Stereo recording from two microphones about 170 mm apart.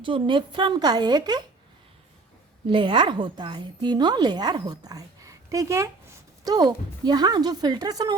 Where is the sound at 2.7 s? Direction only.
30° right (ahead or behind).